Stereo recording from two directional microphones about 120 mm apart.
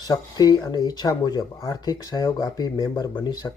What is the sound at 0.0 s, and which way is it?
Speech, 35° left (ahead or behind).